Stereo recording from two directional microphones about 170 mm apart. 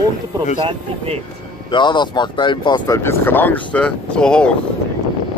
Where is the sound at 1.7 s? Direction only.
25° left (ahead or behind); by 4.5 s 5° left (ahead or behind).